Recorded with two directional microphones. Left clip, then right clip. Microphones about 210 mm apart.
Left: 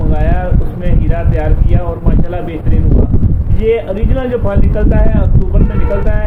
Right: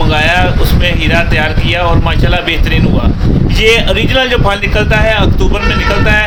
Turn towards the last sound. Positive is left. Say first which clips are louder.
# right 7 dB
turn(degrees=-20)  # may be behind; listen again after turning